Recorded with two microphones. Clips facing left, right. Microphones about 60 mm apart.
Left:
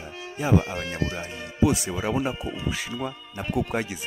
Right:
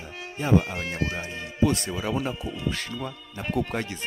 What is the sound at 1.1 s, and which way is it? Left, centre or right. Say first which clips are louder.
Speech: even; centre.